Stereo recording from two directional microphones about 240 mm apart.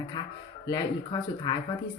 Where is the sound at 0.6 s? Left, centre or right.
Centre.